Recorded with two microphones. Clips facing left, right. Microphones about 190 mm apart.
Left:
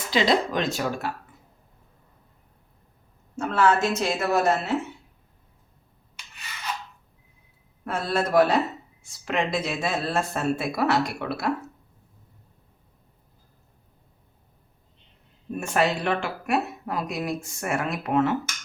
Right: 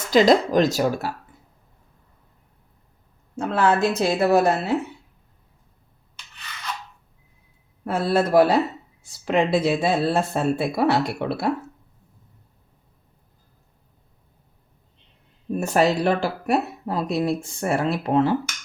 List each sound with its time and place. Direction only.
0.1 s speech: 45° right (ahead or behind)
3.3 s speech: 35° right (ahead or behind)
6.1 s rub: 10° left (ahead or behind)
7.9 s speech: 30° right (ahead or behind)
15.5 s speech: 40° right (ahead or behind)